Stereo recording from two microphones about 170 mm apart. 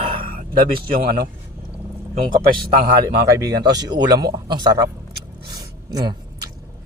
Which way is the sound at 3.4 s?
25° right (ahead or behind).